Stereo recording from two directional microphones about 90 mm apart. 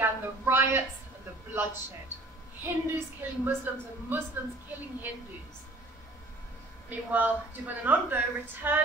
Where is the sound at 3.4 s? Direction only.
20° right (ahead or behind).